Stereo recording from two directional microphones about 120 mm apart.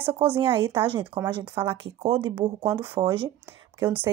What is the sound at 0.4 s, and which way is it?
Speech, 45° right (ahead or behind).